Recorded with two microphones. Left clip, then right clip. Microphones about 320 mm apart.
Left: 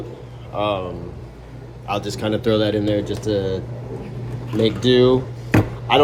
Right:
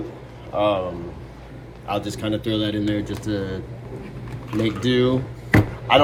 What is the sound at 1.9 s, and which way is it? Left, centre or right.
A man's voice, centre.